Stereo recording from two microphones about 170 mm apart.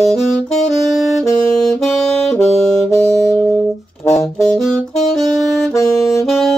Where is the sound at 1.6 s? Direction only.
Centre (ahead or behind).